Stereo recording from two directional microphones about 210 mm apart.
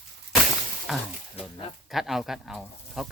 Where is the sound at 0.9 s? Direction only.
Centre (ahead or behind).